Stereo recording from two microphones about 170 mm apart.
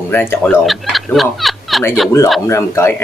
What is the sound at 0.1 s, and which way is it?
Speech, 10° left (ahead or behind).